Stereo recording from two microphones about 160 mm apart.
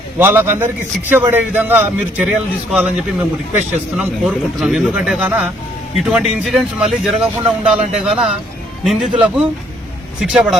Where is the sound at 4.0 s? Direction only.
5° right (ahead or behind).